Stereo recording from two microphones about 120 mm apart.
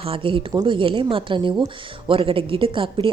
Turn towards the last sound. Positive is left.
turn(degrees=-45)  # may be behind; listen again after turning